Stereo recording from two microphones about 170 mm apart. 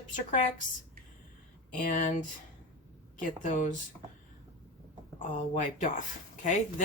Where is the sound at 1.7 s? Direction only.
50° left (ahead or behind).